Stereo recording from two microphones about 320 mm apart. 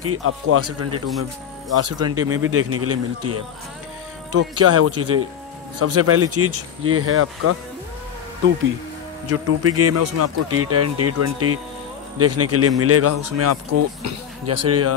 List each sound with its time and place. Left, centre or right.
0.0 s speech: right
9.3 s speech: right